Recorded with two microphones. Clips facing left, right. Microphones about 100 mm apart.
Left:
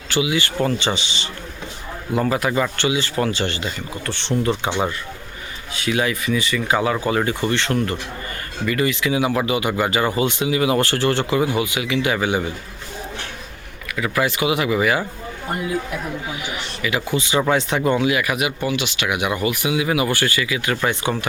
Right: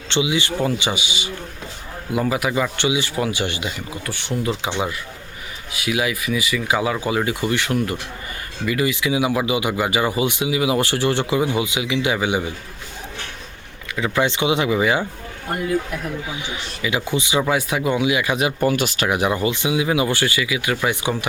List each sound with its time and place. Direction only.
0.1 s speech: 20° right (ahead or behind)
5.7 s speech: 10° right (ahead or behind)
13.9 s speech: 25° right (ahead or behind)
16.3 s speech: 20° right (ahead or behind)
18.6 s speech: 45° right (ahead or behind); by 21.2 s 15° right (ahead or behind)